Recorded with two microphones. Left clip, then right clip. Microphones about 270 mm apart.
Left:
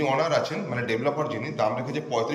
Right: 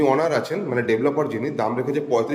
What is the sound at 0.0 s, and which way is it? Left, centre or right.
A man's voice, right.